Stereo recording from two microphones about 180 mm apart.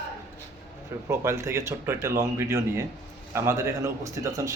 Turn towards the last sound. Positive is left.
turn(degrees=-15)  # may be behind; listen again after turning